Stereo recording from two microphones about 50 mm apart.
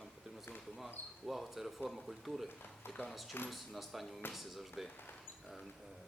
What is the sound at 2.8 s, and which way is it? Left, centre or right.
Speech, left.